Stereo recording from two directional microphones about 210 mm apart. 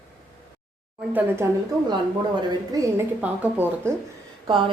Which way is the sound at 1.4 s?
10° right (ahead or behind).